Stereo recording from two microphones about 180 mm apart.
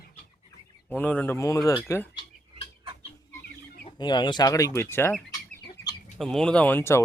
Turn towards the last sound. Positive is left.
turn(degrees=10)  # may be behind; listen again after turning